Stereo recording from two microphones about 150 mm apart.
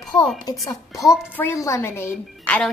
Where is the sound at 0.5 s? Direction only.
Centre (ahead or behind).